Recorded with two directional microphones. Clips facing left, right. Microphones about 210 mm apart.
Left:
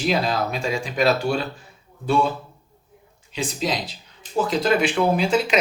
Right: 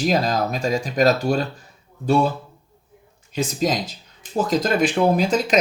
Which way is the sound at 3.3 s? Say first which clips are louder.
Right 4 dB; 45° right (ahead or behind).